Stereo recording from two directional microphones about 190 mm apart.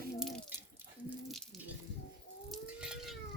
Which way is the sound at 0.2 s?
Centre (ahead or behind).